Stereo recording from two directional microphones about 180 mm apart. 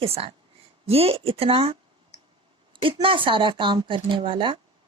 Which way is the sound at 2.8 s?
30° right (ahead or behind).